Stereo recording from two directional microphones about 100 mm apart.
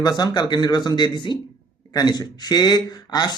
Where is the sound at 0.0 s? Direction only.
45° left (ahead or behind).